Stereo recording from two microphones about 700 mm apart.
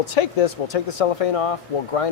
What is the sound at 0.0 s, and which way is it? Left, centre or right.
Speech, left.